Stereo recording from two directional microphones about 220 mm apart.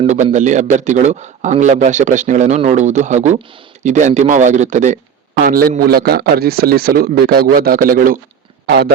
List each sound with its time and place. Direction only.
0.0 s a man's voice: 30° right (ahead or behind); by 8.9 s 50° right (ahead or behind)